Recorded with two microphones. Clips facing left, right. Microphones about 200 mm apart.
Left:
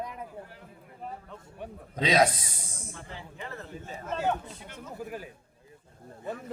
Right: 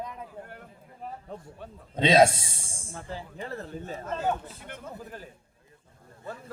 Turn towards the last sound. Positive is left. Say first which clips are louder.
# left 3 dB
turn(degrees=20)  # may be behind; listen again after turning